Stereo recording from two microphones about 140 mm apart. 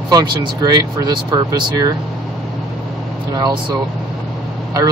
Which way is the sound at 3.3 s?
30° right (ahead or behind).